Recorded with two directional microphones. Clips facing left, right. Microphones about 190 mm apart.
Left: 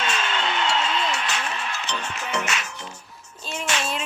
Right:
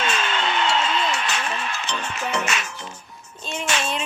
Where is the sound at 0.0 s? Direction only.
50° right (ahead or behind).